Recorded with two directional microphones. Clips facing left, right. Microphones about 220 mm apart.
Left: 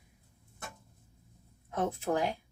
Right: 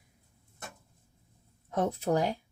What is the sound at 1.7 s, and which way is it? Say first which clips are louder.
Speech: right 3 dB; 40° right (ahead or behind).